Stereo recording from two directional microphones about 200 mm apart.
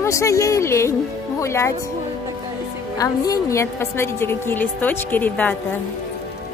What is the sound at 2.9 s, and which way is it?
A woman's voice, 15° left (ahead or behind).